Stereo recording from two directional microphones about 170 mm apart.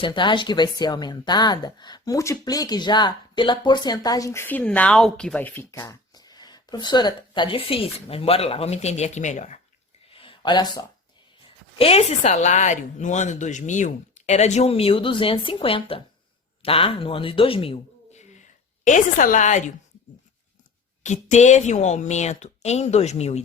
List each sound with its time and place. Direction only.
0.0 s speech: 30° left (ahead or behind); by 9.6 s 45° left (ahead or behind)
10.1 s a sound: 30° left (ahead or behind)
11.8 s a woman's voice: 35° left (ahead or behind)
21.0 s speech: 45° left (ahead or behind)